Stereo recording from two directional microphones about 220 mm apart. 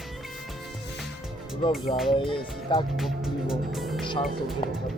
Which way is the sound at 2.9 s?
Centre (ahead or behind).